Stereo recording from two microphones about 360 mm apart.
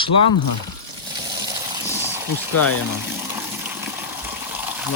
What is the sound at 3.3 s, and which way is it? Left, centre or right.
Water, centre.